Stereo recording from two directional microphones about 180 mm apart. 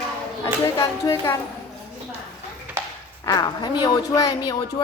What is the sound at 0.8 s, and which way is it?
Speech, 15° left (ahead or behind).